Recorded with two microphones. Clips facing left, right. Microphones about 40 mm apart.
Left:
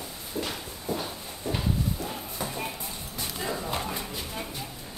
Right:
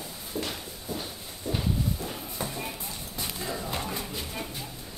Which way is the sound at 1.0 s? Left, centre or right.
Left.